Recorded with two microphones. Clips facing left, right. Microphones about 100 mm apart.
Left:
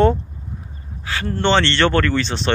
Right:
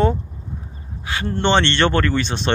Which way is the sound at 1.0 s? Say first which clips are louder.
Left 1 dB; 20° right (ahead or behind).